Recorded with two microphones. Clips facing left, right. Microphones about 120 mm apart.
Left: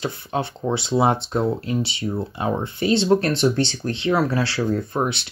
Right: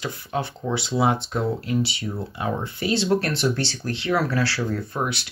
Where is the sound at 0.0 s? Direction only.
30° left (ahead or behind).